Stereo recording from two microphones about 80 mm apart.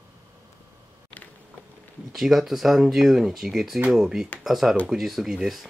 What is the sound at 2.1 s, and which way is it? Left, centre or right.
Speech, centre.